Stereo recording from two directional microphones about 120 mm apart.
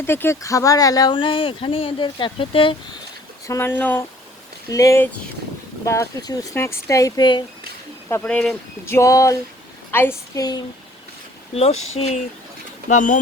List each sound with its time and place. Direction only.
0.0 s speech: 20° left (ahead or behind)
1.1 s speech: 45° left (ahead or behind)
3.4 s speech: 20° left (ahead or behind)
4.7 s speech: 25° left (ahead or behind)
8.2 s speech: 10° left (ahead or behind)
8.9 s speech: 25° left (ahead or behind)
10.3 s speech: 35° left (ahead or behind)
11.5 s speech: 60° left (ahead or behind)
12.9 s speech: 90° left